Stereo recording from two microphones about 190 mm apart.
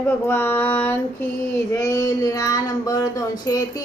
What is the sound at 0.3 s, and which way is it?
Speech, 10° left (ahead or behind).